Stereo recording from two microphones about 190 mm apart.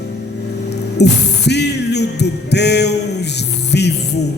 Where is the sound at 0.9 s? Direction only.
60° left (ahead or behind).